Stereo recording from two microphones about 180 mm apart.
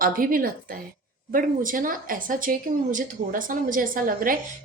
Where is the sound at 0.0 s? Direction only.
50° right (ahead or behind).